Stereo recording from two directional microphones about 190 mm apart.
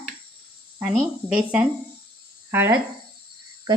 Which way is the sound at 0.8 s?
5° right (ahead or behind).